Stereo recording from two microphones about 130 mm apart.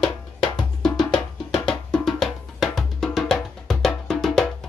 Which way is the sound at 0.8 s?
5° left (ahead or behind).